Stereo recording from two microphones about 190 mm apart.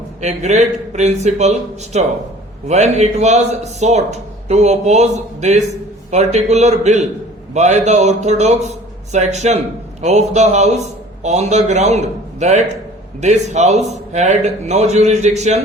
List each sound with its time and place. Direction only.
0.2 s a man's voice: 35° right (ahead or behind)